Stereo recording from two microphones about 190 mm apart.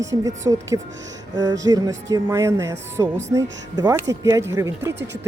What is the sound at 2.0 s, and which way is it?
Speech, 15° right (ahead or behind).